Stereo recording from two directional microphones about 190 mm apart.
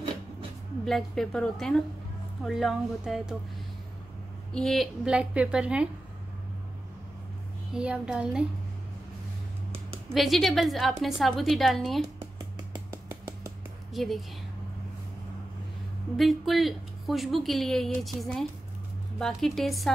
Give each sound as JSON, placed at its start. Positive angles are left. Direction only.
{"t": 0.8, "sound": "a woman's voice", "side_deg": 0}
{"t": 4.6, "sound": "a woman's voice", "side_deg": 0}
{"t": 7.7, "sound": "a woman's voice", "side_deg": -5}
{"t": 10.1, "sound": "a woman's voice", "side_deg": 0}
{"t": 12.4, "sound": "a sound", "side_deg": -20}
{"t": 13.9, "sound": "a woman's voice", "side_deg": 0}
{"t": 16.2, "sound": "a woman's voice", "side_deg": 0}